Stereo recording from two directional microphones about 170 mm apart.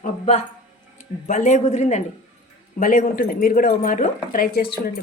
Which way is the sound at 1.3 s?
45° left (ahead or behind).